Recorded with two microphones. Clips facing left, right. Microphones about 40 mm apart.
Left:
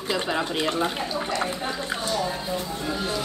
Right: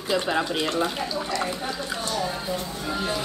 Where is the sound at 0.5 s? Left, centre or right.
Centre.